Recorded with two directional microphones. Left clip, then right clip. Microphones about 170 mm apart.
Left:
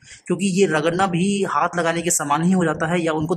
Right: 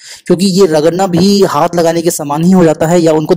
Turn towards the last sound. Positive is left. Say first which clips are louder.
# right 12 dB
turn(degrees=-35)  # may be behind; listen again after turning